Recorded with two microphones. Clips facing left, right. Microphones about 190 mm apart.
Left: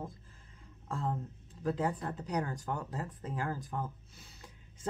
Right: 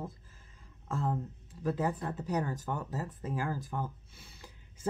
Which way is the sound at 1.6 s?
5° right (ahead or behind).